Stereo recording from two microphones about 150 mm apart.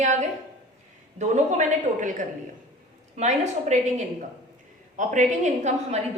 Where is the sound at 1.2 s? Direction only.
55° right (ahead or behind).